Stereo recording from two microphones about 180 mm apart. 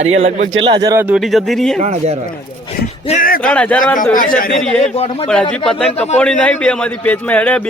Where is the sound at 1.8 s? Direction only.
40° right (ahead or behind).